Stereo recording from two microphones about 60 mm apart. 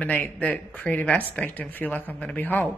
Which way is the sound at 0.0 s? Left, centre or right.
Left.